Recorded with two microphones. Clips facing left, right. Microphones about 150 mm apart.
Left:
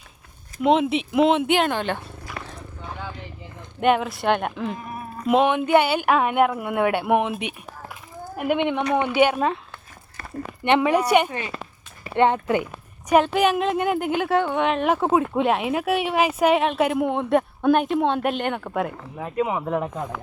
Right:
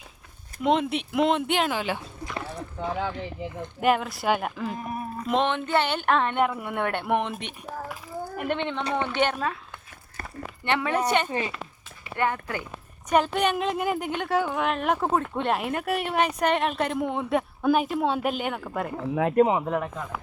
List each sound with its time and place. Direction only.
0.6 s speech: centre (ahead or behind)
3.8 s speech: centre (ahead or behind)
5.3 s speech: 10° left (ahead or behind)
10.6 s speech: 20° left (ahead or behind)
11.3 s speech: 30° right (ahead or behind)
12.1 s speech: 25° left (ahead or behind)
13.1 s speech: 5° left (ahead or behind)
19.4 s speech: 55° right (ahead or behind)